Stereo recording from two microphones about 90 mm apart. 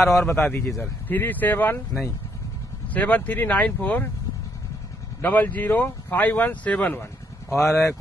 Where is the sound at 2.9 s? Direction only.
15° left (ahead or behind).